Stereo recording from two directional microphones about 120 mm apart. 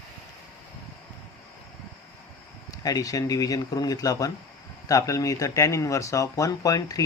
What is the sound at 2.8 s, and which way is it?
Speech, 30° left (ahead or behind).